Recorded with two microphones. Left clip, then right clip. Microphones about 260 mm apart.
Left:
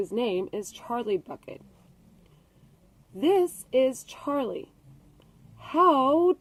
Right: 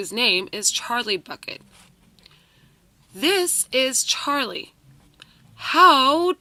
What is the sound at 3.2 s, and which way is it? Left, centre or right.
Speech, right.